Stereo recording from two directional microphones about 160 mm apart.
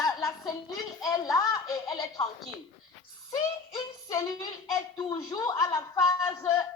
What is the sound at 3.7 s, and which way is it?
A child's voice, 25° left (ahead or behind).